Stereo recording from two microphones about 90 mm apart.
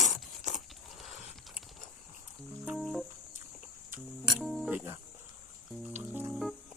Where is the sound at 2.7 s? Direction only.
Centre (ahead or behind).